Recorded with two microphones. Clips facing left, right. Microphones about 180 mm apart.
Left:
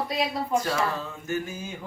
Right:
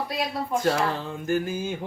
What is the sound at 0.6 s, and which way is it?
Speech, 55° right (ahead or behind).